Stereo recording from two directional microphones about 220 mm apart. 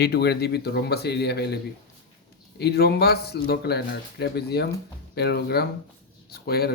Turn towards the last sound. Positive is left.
turn(degrees=45)  # may be behind; listen again after turning